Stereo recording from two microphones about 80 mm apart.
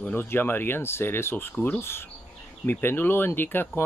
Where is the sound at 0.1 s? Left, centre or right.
Left.